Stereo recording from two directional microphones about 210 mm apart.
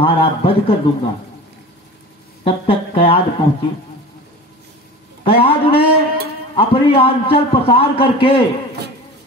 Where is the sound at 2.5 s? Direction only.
25° left (ahead or behind).